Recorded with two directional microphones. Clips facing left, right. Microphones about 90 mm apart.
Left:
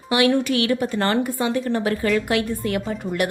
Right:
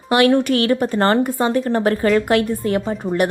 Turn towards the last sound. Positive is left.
turn(degrees=-35)  # may be behind; listen again after turning